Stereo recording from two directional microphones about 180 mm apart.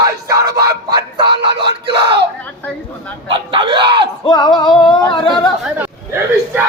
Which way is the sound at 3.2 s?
30° right (ahead or behind).